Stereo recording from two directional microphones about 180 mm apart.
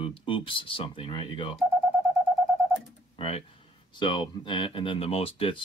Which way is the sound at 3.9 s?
25° left (ahead or behind).